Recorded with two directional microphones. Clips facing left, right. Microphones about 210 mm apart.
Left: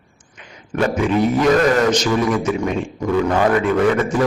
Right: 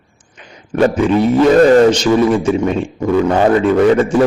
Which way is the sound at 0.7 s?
30° right (ahead or behind).